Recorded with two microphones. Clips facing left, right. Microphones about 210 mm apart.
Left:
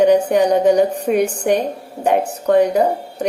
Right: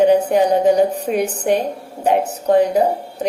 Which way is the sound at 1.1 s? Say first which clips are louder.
Left 2 dB; 55° left (ahead or behind).